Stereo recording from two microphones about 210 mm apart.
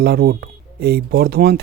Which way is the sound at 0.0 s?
50° right (ahead or behind).